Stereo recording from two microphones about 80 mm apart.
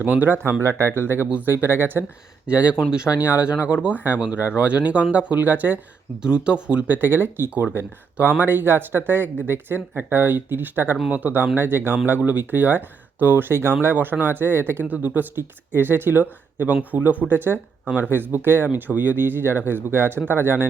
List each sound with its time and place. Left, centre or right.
0.0 s speech: right
0.6 s speech: right
1.3 s speech: right
2.5 s speech: centre
6.2 s speech: centre; by 20.7 s right